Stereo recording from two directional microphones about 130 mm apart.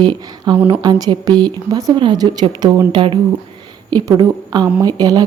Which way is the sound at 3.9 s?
30° right (ahead or behind).